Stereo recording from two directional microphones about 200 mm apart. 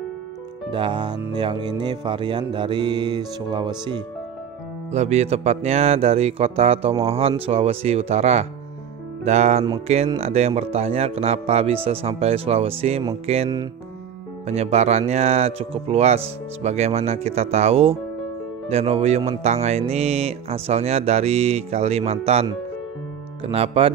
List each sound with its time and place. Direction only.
0.7 s music: 25° right (ahead or behind)
4.9 s speech: 30° right (ahead or behind)
13.3 s music: 25° right (ahead or behind)
14.5 s speech: 30° right (ahead or behind)
23.4 s music: 30° right (ahead or behind)